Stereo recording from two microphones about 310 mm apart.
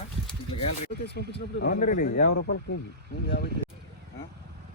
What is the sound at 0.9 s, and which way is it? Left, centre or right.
Speech, left.